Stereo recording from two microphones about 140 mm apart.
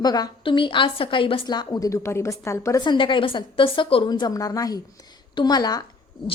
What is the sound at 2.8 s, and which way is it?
A woman's voice, 35° left (ahead or behind).